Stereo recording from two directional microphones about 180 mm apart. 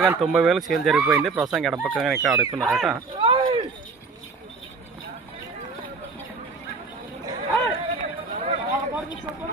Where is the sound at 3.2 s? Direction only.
30° right (ahead or behind).